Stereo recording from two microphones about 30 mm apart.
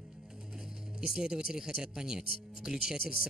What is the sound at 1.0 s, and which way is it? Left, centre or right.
Speech, right.